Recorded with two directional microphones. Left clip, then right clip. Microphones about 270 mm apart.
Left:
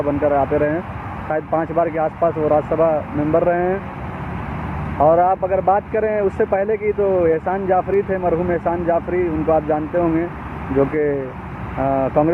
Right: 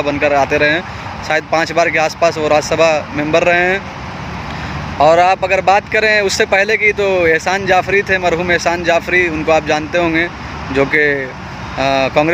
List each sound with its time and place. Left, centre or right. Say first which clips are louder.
0.2 s speech: right 5 dB; right
4.9 s speech: right 5 dB; centre